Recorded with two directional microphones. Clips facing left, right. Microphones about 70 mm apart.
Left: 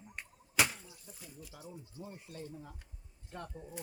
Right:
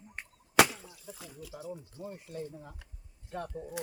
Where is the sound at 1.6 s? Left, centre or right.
Right.